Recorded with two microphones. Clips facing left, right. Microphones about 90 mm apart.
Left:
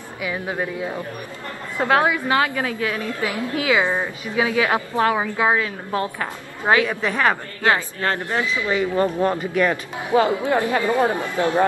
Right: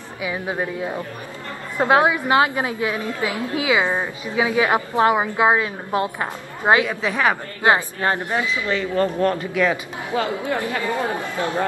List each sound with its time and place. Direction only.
0.2 s a woman's voice: 20° right (ahead or behind)
6.9 s a woman's voice: 5° right (ahead or behind)
7.6 s a woman's voice: 20° right (ahead or behind)
8.6 s speech: 15° left (ahead or behind)
9.5 s a woman's voice: centre (ahead or behind)
10.2 s speech: 20° left (ahead or behind)